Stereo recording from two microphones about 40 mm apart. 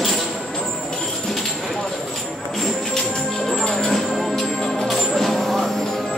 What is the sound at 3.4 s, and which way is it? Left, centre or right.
Music, centre.